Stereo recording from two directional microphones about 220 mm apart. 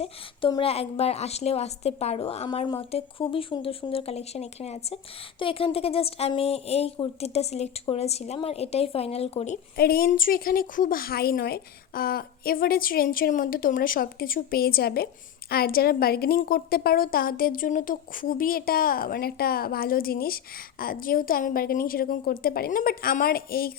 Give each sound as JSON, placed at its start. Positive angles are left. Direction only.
{"t": 0.0, "sound": "a woman's voice", "side_deg": 25}
{"t": 9.7, "sound": "a woman's voice", "side_deg": 45}